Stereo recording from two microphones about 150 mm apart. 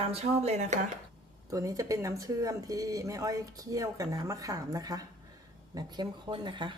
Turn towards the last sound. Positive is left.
turn(degrees=-30)  # may be behind; listen again after turning